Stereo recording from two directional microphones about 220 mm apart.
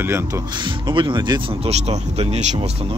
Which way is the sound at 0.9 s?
20° right (ahead or behind).